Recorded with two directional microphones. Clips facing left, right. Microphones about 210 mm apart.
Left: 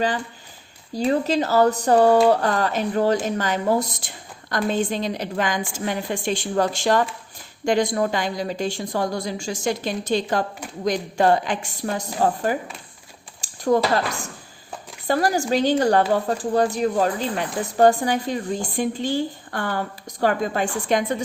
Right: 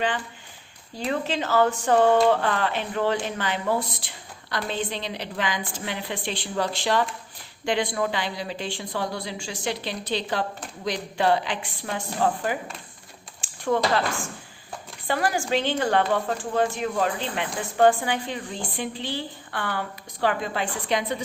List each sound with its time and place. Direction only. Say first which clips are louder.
0.9 s speech: left 7 dB; 40° left (ahead or behind)